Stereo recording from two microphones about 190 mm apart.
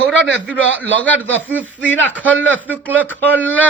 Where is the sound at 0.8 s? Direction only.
10° left (ahead or behind).